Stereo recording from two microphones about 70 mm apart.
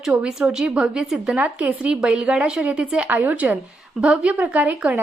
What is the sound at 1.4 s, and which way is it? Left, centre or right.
A woman's voice, centre.